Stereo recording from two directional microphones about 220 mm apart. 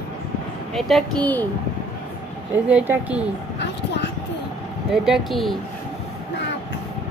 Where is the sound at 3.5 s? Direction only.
50° left (ahead or behind).